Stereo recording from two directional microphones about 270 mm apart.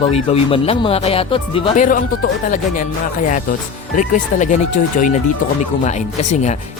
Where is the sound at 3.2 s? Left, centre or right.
Left.